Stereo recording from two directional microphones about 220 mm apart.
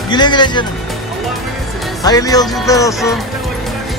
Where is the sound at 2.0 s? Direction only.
15° left (ahead or behind).